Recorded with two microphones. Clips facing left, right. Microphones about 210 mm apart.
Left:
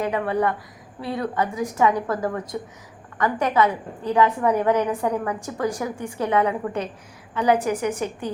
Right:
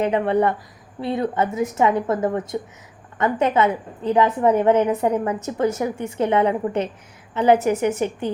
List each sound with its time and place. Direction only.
0.0 s a woman's voice: 25° right (ahead or behind)